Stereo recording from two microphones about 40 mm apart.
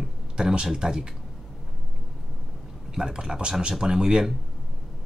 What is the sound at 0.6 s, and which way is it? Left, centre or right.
Speech, centre.